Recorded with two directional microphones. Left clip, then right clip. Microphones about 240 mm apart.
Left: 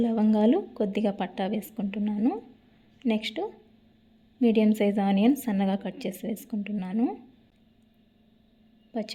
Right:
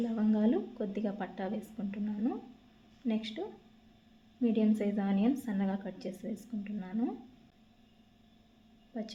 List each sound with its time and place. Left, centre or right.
0.2 s a woman's voice: left
8.9 s a woman's voice: left